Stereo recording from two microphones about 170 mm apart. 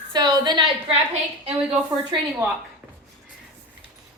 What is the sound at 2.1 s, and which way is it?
Speech, 30° right (ahead or behind).